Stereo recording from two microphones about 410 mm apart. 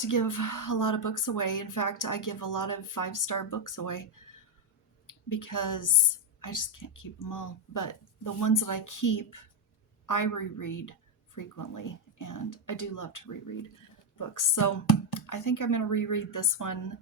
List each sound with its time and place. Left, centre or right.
0.0 s a woman's voice: left